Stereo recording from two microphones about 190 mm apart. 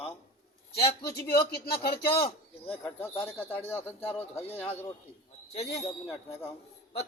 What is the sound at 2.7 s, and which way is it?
Speech, 5° left (ahead or behind).